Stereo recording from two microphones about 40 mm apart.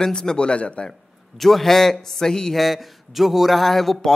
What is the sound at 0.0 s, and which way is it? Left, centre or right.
Speech, centre.